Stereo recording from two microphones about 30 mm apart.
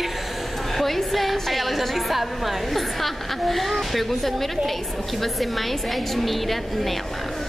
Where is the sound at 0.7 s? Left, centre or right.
Centre.